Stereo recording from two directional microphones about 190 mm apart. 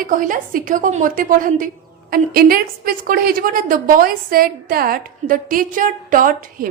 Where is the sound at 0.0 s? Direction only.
45° right (ahead or behind).